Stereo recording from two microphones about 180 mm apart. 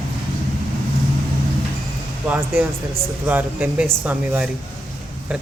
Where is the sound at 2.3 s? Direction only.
10° right (ahead or behind).